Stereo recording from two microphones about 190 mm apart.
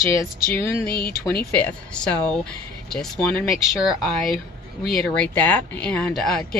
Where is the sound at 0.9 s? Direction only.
50° left (ahead or behind).